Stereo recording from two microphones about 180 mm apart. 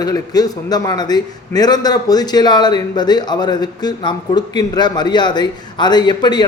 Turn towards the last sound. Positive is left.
turn(degrees=25)  # may be behind; listen again after turning